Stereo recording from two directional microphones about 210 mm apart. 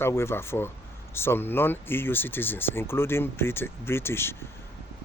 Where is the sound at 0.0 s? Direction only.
10° left (ahead or behind).